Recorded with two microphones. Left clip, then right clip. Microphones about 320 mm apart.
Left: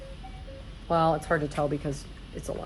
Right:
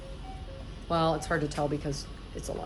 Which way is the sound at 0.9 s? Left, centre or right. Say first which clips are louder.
Left 3 dB; centre.